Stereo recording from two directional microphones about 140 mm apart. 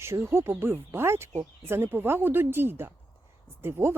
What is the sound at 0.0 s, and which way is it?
Speech, 15° right (ahead or behind).